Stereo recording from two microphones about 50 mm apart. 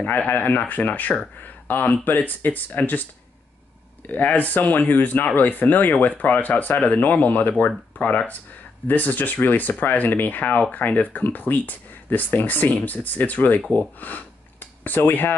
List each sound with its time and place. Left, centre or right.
0.0 s speech: left